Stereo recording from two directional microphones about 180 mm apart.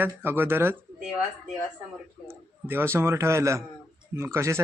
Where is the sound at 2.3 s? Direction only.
15° right (ahead or behind).